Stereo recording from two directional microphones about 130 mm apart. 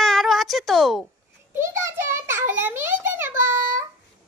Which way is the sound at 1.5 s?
20° right (ahead or behind).